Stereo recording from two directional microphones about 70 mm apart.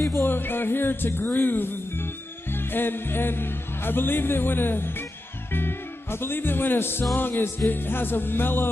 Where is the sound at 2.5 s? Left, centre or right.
Left.